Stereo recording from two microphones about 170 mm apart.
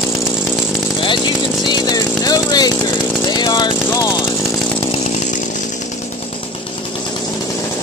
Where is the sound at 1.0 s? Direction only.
25° left (ahead or behind).